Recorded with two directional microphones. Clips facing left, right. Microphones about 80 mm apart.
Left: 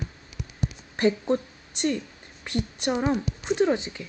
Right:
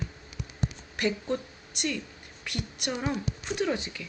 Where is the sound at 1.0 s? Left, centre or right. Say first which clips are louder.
Left 6 dB; left.